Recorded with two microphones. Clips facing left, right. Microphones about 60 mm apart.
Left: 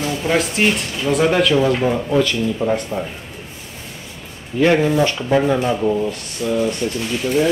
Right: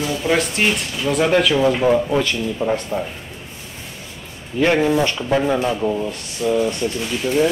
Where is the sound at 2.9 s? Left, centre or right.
Right.